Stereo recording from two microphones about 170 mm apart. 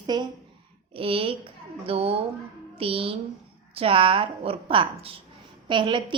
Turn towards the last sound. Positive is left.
turn(degrees=-30)  # may be behind; listen again after turning